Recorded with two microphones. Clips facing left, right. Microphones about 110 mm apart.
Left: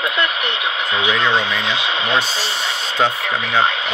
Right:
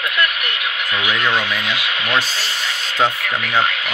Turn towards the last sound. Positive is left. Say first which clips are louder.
# left 1 dB
turn(degrees=25)  # may be behind; listen again after turning